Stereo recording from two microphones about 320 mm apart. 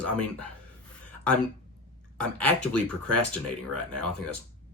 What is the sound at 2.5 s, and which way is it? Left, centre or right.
Speech, right.